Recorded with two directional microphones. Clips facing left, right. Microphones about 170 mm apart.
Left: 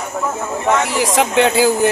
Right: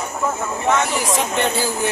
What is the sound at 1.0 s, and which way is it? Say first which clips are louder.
Speech: left 6 dB; 90° left.